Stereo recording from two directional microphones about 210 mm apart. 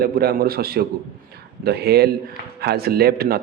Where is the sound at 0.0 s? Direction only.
45° right (ahead or behind).